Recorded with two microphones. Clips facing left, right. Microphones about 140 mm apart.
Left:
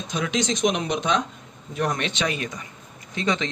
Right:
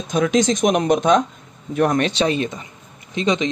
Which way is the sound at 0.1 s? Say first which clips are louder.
Right 8 dB; 45° right (ahead or behind).